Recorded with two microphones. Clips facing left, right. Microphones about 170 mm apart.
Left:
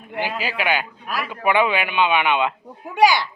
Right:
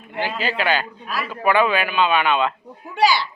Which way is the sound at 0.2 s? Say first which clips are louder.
Right 1 dB; 10° left (ahead or behind).